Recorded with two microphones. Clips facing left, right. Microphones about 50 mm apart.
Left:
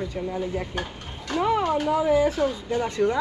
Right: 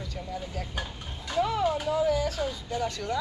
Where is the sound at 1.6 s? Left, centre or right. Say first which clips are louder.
Left 4 dB; left.